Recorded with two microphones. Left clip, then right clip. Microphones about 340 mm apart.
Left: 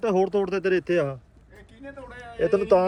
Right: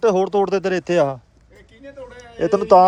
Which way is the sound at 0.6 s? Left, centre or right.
Right.